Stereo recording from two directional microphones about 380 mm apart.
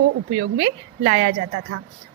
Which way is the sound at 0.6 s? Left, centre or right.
Right.